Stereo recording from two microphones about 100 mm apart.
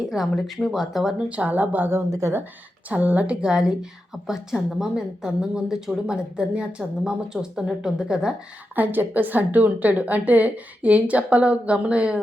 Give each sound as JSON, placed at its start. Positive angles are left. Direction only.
{"t": 0.0, "sound": "speech", "side_deg": 0}
{"t": 1.3, "sound": "speech", "side_deg": -15}
{"t": 2.9, "sound": "a woman's voice", "side_deg": -15}
{"t": 8.7, "sound": "a woman's voice", "side_deg": -20}